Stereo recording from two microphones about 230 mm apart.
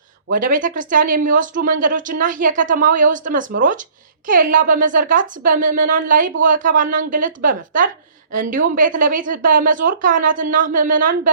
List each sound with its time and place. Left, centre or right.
0.3 s speech: right